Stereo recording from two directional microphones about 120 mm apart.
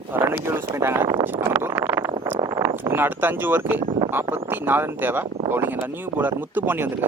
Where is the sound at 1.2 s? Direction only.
15° right (ahead or behind).